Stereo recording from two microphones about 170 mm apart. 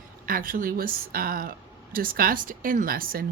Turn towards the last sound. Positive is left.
turn(degrees=-60)  # may be behind; listen again after turning